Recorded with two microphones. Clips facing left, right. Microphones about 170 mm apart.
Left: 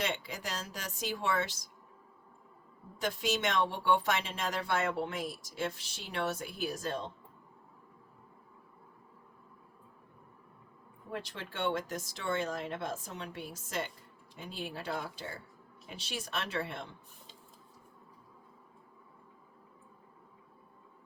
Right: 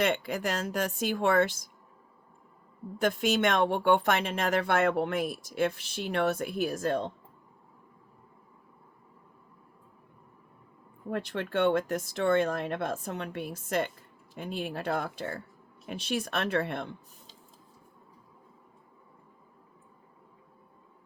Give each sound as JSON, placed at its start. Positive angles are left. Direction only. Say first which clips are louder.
{"t": 0.0, "sound": "speech", "louder": "right 8 dB", "side_deg": -55}
{"t": 3.0, "sound": "speech", "louder": "right 7 dB", "side_deg": -55}
{"t": 11.1, "sound": "speech", "louder": "right 10 dB", "side_deg": -60}